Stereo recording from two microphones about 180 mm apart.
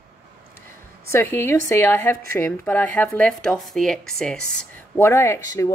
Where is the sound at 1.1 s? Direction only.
15° left (ahead or behind).